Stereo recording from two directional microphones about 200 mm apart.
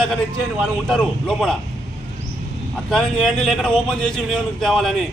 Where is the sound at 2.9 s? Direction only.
Centre (ahead or behind).